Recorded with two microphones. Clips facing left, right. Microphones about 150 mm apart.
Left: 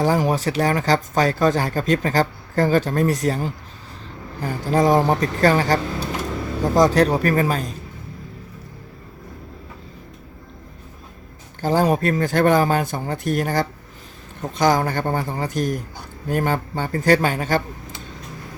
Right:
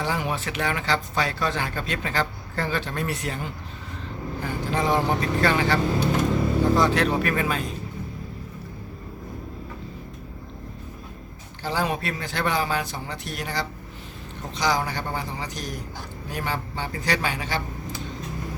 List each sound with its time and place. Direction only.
0.0 s speech: 40° left (ahead or behind)
11.6 s speech: 45° left (ahead or behind)